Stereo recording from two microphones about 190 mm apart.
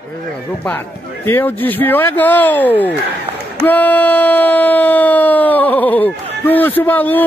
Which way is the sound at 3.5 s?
10° left (ahead or behind).